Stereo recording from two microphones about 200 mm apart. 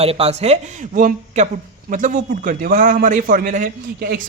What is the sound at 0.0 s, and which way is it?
A man's voice, 30° right (ahead or behind).